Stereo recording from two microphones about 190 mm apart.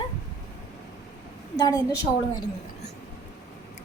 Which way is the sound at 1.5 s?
20° left (ahead or behind).